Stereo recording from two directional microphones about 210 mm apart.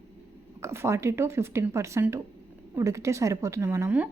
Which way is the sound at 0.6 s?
10° right (ahead or behind).